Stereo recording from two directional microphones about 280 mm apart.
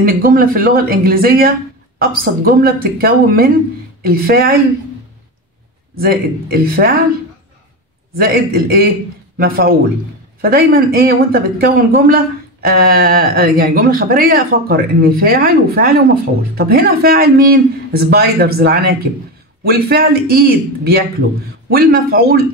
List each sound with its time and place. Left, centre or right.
0.0 s speech: right
5.9 s speech: right
8.2 s speech: right